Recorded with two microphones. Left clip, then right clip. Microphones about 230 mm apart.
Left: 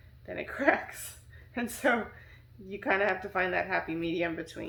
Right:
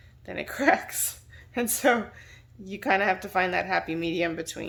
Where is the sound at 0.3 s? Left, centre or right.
Right.